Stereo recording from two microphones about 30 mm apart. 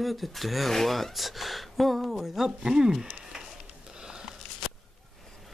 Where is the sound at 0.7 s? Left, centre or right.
Centre.